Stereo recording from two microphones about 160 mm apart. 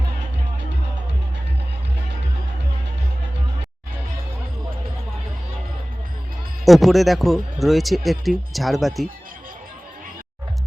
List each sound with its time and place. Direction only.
6.7 s speech: centre (ahead or behind)